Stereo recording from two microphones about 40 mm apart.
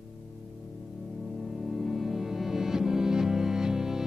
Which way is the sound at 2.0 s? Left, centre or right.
Centre.